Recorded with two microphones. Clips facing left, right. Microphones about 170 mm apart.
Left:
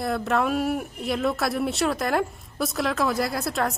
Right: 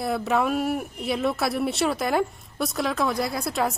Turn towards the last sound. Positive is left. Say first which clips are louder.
# even
turn(degrees=0)  # may be behind; listen again after turning